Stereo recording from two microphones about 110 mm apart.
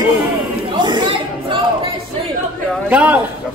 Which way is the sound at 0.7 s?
45° right (ahead or behind).